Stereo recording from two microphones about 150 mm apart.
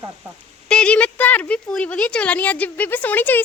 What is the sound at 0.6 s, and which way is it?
Speech, 5° left (ahead or behind).